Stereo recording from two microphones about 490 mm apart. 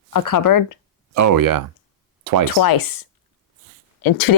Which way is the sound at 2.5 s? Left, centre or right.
Left.